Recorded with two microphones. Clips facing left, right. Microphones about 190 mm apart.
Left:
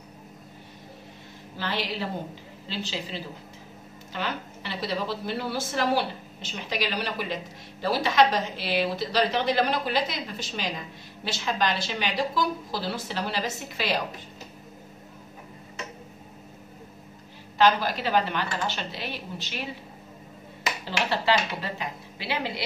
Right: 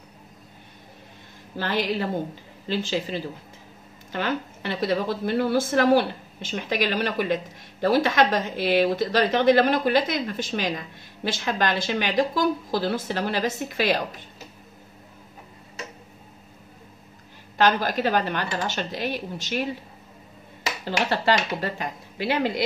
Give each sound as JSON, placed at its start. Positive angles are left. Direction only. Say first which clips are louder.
{"t": 1.6, "sound": "a woman's voice", "louder": "right 5 dB", "side_deg": -50}
{"t": 17.6, "sound": "a woman's voice", "louder": "right 1 dB", "side_deg": -50}
{"t": 20.8, "sound": "a woman's voice", "louder": "right 3 dB", "side_deg": -50}